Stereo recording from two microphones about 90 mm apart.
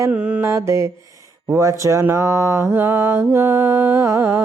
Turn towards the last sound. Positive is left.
turn(degrees=-25)  # may be behind; listen again after turning